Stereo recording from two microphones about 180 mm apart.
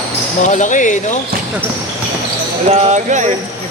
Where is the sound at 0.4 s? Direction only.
45° left (ahead or behind).